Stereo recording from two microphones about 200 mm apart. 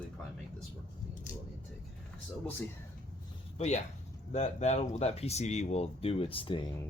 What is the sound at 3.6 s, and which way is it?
Speech, 35° left (ahead or behind).